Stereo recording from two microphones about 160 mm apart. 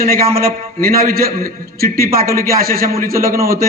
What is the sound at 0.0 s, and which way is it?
A man's voice, 70° right (ahead or behind).